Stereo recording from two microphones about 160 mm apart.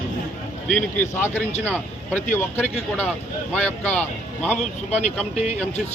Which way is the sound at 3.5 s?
10° left (ahead or behind).